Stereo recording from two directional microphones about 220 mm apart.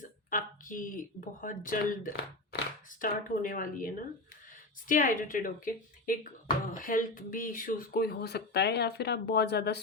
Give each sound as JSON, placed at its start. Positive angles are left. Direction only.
{"t": 0.3, "sound": "speech", "side_deg": 40}